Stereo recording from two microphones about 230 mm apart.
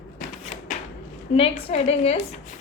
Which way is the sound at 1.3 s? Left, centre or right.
Left.